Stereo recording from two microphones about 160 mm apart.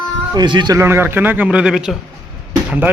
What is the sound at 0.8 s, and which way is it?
A man's voice, 15° right (ahead or behind).